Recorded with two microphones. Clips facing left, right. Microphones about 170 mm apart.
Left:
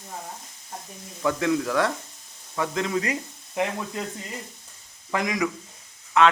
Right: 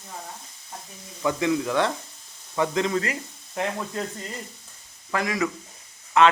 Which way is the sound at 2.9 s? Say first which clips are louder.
Even; 15° left (ahead or behind).